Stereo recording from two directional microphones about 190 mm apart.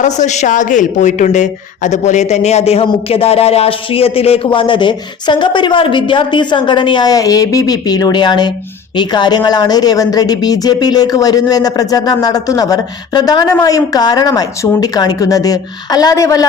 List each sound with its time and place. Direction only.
0.0 s a woman's voice: 40° left (ahead or behind); by 16.5 s 15° left (ahead or behind)